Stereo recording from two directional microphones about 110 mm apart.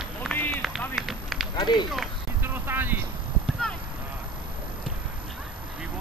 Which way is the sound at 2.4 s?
20° right (ahead or behind).